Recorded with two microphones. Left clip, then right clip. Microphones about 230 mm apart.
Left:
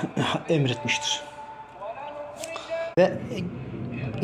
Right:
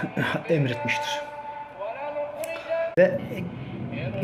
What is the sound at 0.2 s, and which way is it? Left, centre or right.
Speech, centre.